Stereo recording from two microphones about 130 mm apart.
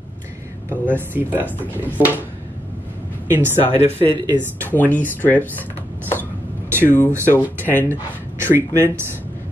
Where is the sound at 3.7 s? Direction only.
55° left (ahead or behind).